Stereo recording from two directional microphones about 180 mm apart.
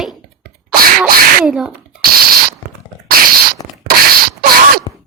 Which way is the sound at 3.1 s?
55° right (ahead or behind).